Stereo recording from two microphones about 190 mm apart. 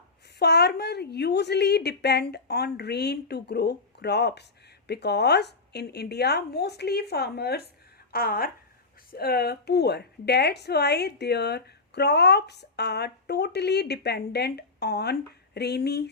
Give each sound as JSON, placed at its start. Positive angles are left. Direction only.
{"t": 0.3, "sound": "a woman's voice", "side_deg": 60}